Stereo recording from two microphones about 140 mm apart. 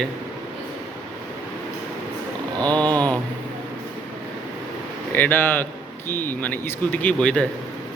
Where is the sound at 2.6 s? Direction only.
10° left (ahead or behind).